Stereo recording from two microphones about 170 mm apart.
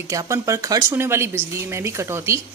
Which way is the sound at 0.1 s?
20° right (ahead or behind).